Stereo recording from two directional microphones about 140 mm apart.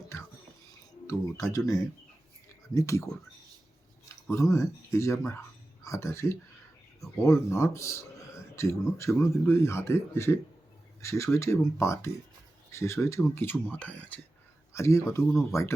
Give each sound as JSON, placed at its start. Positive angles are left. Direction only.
{"t": 1.0, "sound": "speech", "side_deg": 25}
{"t": 4.3, "sound": "speech", "side_deg": 20}
{"t": 14.7, "sound": "speech", "side_deg": 20}